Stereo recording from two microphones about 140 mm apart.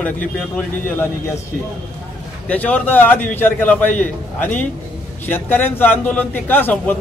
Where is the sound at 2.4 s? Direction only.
10° left (ahead or behind).